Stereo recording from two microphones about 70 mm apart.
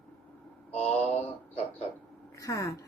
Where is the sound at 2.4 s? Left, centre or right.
Left.